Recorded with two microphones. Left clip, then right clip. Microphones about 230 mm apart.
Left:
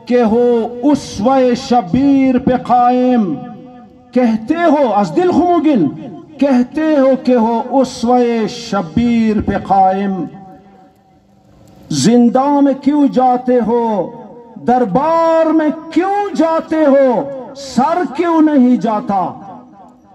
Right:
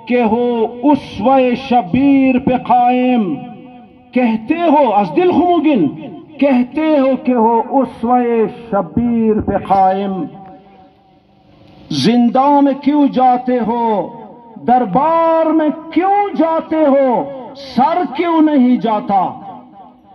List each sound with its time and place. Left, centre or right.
0.0 s a sound: left
4.1 s a man's voice: left
9.8 s a man's voice: left
11.9 s a man's voice: left